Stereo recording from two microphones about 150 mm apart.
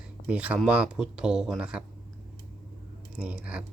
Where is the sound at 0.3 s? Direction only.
10° right (ahead or behind).